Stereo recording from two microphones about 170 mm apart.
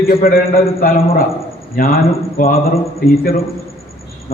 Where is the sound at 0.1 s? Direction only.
55° left (ahead or behind).